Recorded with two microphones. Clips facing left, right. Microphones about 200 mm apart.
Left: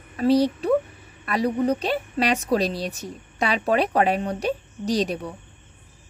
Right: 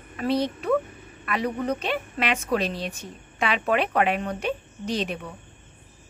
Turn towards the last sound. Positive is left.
turn(degrees=35)  # may be behind; listen again after turning